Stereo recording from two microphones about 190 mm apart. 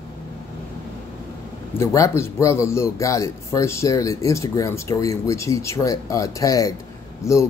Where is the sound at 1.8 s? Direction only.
15° left (ahead or behind).